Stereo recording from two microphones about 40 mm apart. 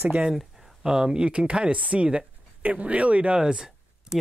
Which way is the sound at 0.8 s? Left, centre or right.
Centre.